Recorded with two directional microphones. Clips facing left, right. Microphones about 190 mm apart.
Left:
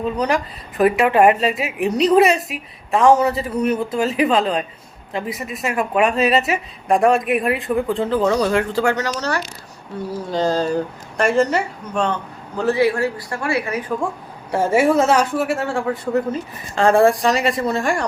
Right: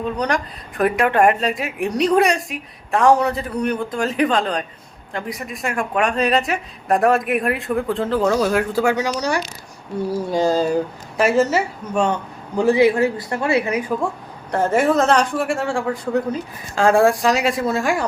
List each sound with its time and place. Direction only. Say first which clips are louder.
0.2 s a woman's voice: left 2 dB; 5° left (ahead or behind); by 13.9 s 20° right (ahead or behind)
14.5 s a woman's voice: left 1 dB; 10° left (ahead or behind)